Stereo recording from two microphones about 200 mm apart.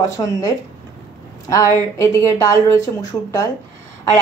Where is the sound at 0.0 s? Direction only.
15° left (ahead or behind).